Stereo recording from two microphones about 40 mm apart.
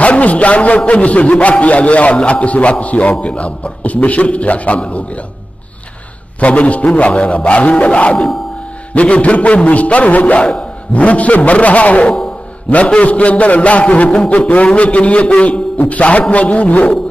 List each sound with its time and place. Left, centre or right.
0.0 s a man's voice: left
6.4 s a man's voice: left